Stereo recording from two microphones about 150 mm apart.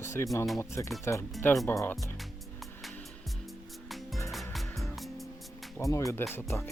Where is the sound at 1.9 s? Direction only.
Centre (ahead or behind).